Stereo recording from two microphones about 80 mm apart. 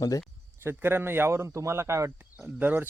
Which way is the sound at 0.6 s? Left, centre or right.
Right.